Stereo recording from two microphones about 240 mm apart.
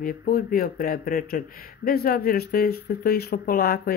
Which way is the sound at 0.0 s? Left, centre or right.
Left.